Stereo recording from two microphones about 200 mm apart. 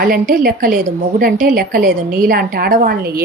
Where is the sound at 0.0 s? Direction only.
45° right (ahead or behind).